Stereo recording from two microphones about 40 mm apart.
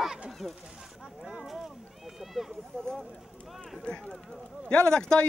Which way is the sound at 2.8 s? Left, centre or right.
Centre.